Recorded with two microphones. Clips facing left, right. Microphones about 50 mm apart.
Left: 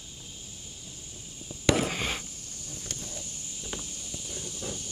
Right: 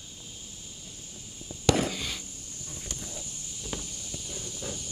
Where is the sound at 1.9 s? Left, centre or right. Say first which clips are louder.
Left 4 dB; left.